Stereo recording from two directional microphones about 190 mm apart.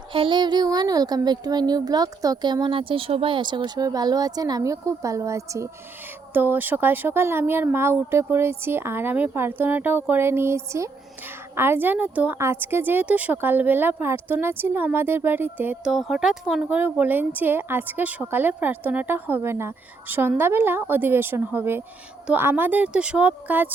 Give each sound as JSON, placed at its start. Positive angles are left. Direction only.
{"t": 0.1, "sound": "a woman's voice", "side_deg": -25}